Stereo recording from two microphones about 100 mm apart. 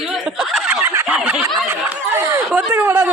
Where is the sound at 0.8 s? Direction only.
20° right (ahead or behind).